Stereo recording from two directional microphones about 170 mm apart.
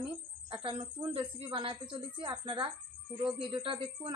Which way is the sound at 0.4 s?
30° right (ahead or behind).